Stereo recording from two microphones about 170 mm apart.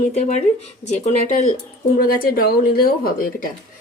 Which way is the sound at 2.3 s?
60° left (ahead or behind).